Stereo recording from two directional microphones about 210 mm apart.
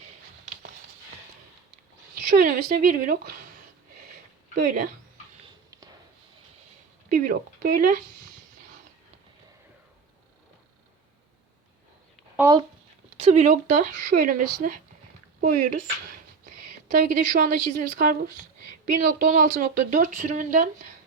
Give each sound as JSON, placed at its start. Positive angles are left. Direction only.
{"t": 2.3, "sound": "speech", "side_deg": -40}
{"t": 4.5, "sound": "speech", "side_deg": -40}
{"t": 7.1, "sound": "speech", "side_deg": -40}
{"t": 12.4, "sound": "speech", "side_deg": -15}
{"t": 13.1, "sound": "speech", "side_deg": -30}
{"t": 17.1, "sound": "speech", "side_deg": -40}